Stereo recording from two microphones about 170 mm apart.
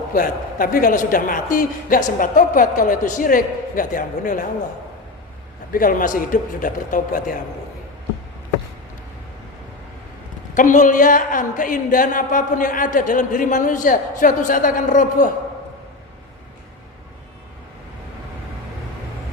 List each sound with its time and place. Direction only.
0.1 s speech: 55° left (ahead or behind)
5.7 s speech: 55° left (ahead or behind)
10.5 s speech: 50° left (ahead or behind)